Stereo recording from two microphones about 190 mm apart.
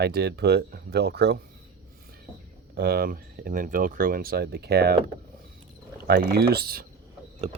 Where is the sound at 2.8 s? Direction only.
55° right (ahead or behind).